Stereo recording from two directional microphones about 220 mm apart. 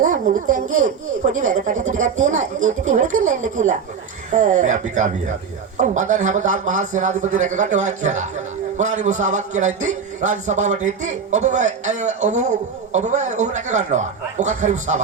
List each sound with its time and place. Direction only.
0.0 s speech: 35° right (ahead or behind)